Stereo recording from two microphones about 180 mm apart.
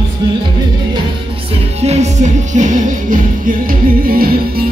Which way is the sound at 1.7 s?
35° right (ahead or behind).